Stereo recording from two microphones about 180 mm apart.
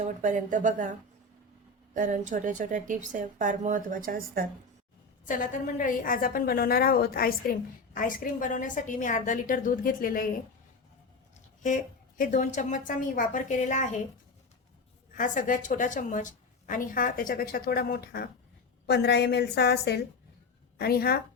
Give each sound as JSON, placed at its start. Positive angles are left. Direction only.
{"t": 0.0, "sound": "a woman's voice", "side_deg": -45}
{"t": 1.9, "sound": "a woman's voice", "side_deg": -45}
{"t": 5.2, "sound": "a woman's voice", "side_deg": 45}
{"t": 11.6, "sound": "a woman's voice", "side_deg": 45}
{"t": 15.1, "sound": "a woman's voice", "side_deg": 50}